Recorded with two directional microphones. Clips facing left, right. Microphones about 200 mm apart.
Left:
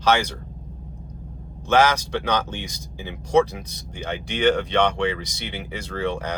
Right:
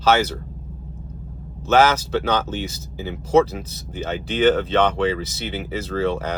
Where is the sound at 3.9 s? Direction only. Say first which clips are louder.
Right 4 dB; 15° left (ahead or behind).